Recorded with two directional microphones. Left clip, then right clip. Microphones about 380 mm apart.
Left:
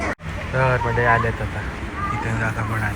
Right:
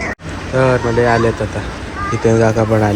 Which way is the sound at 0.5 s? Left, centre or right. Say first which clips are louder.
Right 7 dB; centre.